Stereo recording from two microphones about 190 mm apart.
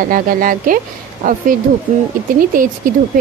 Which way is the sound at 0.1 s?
45° right (ahead or behind).